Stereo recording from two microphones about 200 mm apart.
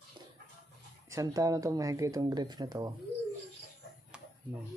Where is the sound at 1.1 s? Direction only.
15° right (ahead or behind).